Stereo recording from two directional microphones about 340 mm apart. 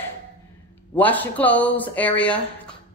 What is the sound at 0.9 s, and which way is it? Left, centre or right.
Speech, centre.